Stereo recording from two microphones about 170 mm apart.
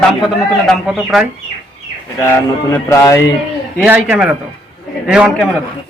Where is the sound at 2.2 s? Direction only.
15° left (ahead or behind).